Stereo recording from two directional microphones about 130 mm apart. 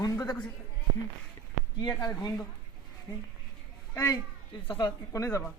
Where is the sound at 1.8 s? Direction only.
30° left (ahead or behind).